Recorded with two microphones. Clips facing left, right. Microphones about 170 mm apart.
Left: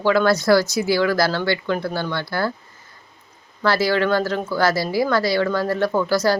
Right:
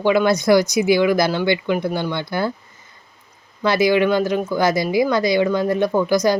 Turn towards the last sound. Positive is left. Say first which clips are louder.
# right 2 dB
turn(degrees=-15)  # may be behind; listen again after turning